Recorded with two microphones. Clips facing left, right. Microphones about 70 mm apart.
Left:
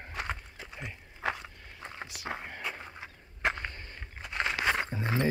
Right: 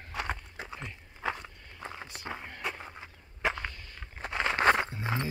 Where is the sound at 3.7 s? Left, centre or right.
Left.